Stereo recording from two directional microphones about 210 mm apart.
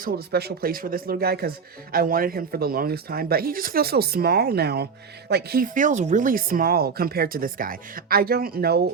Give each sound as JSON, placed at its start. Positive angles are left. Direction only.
{"t": 0.0, "sound": "speech", "side_deg": -50}